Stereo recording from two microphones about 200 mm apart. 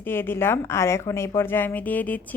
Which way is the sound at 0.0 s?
10° left (ahead or behind).